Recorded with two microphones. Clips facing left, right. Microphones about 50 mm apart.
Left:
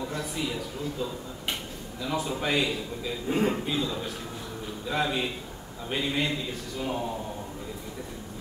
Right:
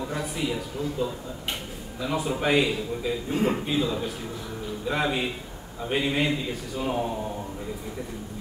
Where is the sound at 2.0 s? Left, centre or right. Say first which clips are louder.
Right 3 dB; centre.